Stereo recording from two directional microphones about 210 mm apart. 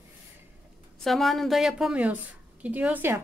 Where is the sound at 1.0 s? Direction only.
Centre (ahead or behind).